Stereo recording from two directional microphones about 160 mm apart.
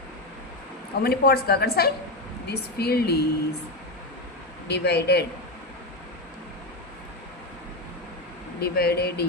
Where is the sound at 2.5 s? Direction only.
90° left.